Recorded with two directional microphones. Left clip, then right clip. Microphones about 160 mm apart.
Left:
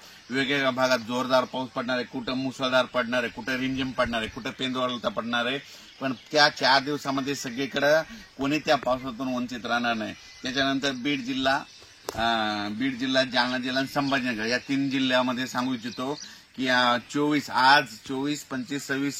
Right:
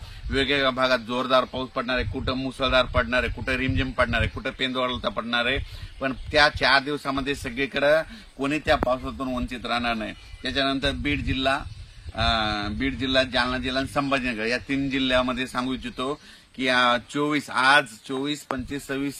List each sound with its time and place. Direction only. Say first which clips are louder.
0.3 s speech: right 3 dB; 5° right (ahead or behind)
12.2 s speech: right 2 dB; 40° right (ahead or behind)
13.5 s speech: right 1 dB; centre (ahead or behind)
16.5 s speech: right 2 dB; 35° right (ahead or behind)